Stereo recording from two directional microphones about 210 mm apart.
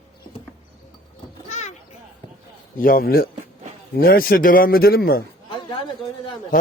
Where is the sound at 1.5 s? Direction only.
35° left (ahead or behind).